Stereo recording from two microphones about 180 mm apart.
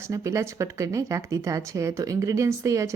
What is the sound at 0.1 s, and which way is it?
Speech, 15° right (ahead or behind).